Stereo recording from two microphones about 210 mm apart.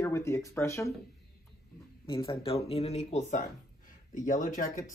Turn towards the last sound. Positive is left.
turn(degrees=40)  # may be behind; listen again after turning